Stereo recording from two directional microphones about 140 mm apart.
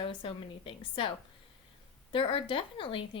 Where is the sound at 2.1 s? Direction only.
40° left (ahead or behind).